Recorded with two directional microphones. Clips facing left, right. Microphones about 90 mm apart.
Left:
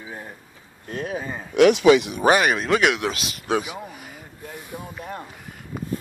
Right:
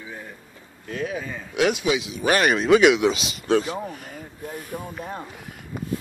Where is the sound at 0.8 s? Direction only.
40° left (ahead or behind).